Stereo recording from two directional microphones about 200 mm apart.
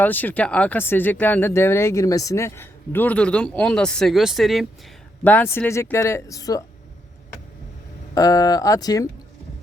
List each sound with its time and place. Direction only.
0.0 s speech: 10° left (ahead or behind)
8.1 s speech: 20° left (ahead or behind)